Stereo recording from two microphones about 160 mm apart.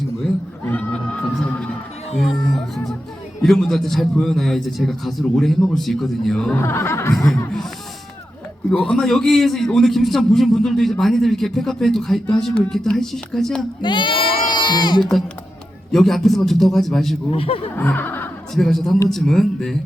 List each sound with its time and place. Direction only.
0.6 s a sound: 10° left (ahead or behind)
2.1 s music: centre (ahead or behind)
3.4 s a man's voice: centre (ahead or behind)
6.6 s speech: 15° left (ahead or behind)
7.2 s a man's voice: centre (ahead or behind)
8.7 s a man's voice: centre (ahead or behind)
13.8 s speech: 30° left (ahead or behind)
15.9 s a man's voice: centre (ahead or behind)
17.3 s speech: 35° left (ahead or behind)
17.7 s snicker: 10° left (ahead or behind)
18.5 s a man's voice: centre (ahead or behind)